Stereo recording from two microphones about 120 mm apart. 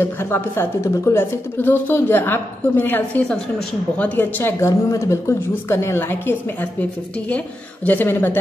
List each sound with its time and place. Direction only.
0.0 s speech: 20° left (ahead or behind)